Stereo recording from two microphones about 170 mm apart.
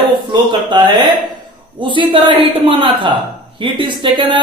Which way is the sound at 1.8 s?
30° right (ahead or behind).